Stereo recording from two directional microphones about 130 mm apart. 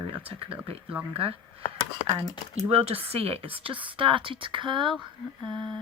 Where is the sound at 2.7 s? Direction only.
45° right (ahead or behind).